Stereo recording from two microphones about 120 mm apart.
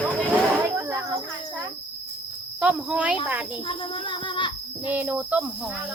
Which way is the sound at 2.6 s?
10° right (ahead or behind).